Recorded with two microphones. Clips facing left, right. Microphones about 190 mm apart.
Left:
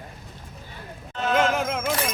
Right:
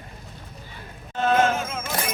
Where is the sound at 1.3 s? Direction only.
70° left (ahead or behind).